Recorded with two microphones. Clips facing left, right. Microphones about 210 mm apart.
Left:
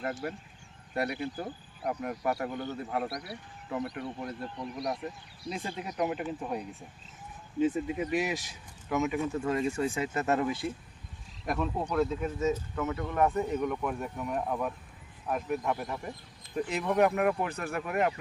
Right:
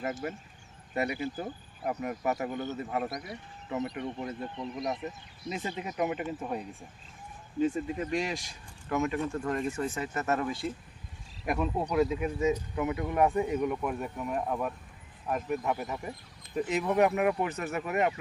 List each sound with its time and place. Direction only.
0.0 s speech: centre (ahead or behind); by 10.5 s 15° left (ahead or behind)
11.4 s speech: 10° right (ahead or behind)